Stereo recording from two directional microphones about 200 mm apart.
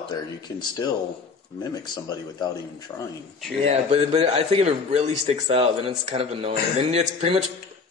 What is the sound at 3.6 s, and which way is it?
A man's voice, 30° right (ahead or behind).